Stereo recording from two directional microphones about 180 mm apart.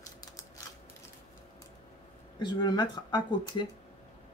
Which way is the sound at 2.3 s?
25° left (ahead or behind).